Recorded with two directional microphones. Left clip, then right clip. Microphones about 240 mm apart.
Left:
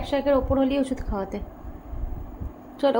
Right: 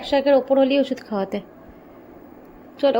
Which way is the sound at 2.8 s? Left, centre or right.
Centre.